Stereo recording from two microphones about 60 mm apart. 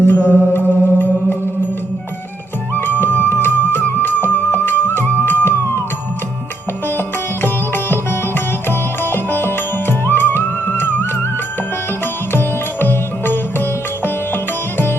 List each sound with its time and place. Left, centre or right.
0.0 s music: left
2.7 s music: left
7.4 s sitar: left
8.6 s music: left
12.3 s music: left